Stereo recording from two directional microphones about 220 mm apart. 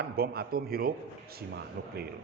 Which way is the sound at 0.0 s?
45° right (ahead or behind).